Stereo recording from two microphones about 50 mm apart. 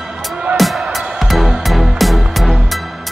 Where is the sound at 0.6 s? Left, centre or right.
Centre.